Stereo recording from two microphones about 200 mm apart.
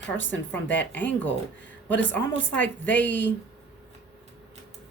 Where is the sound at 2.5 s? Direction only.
5° left (ahead or behind).